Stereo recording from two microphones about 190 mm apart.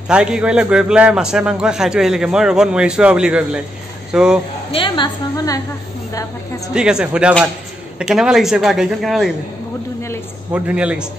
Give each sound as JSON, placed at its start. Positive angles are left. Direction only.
{"t": 0.1, "sound": "a man's voice", "side_deg": -5}
{"t": 4.7, "sound": "a woman's voice", "side_deg": 25}
{"t": 6.7, "sound": "a man's voice", "side_deg": -5}
{"t": 10.5, "sound": "a man's voice", "side_deg": -5}